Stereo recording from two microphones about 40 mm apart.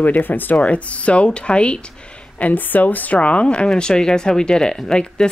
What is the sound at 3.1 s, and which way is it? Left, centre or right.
Speech, left.